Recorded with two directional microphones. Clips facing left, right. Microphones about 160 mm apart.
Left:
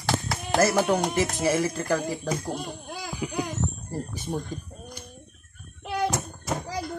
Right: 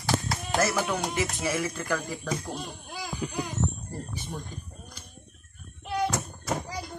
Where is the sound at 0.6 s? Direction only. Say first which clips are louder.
Left 6 dB; 40° left (ahead or behind).